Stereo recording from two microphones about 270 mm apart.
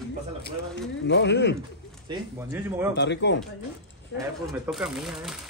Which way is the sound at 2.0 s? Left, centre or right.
Centre.